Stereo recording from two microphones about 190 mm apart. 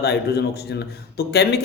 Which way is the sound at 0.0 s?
55° left (ahead or behind).